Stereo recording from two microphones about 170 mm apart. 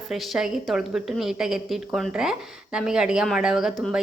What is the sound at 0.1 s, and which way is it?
Speech, centre (ahead or behind).